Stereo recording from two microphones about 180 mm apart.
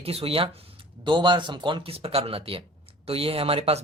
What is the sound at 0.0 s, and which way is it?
Speech, 35° right (ahead or behind).